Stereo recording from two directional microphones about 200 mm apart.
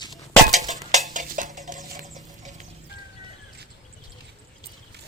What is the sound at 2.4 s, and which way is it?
Music, 40° right (ahead or behind).